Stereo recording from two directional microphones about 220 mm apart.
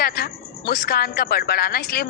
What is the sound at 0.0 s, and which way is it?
A woman's voice, 45° left (ahead or behind).